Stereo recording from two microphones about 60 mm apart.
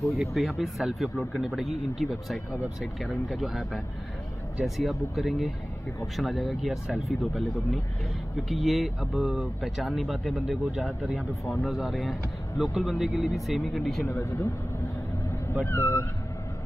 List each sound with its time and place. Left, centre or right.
0.1 s speech: centre
14.2 s speech: left
15.6 s speech: left